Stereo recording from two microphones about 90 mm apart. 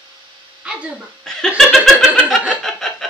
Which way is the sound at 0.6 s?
10° right (ahead or behind).